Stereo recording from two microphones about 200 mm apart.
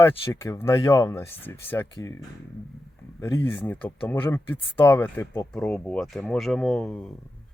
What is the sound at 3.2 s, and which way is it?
Speech, 15° left (ahead or behind).